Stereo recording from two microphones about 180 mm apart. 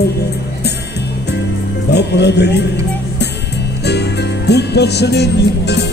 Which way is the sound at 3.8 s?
70° left (ahead or behind).